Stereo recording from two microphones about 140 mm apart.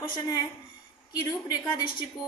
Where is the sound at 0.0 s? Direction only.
25° left (ahead or behind).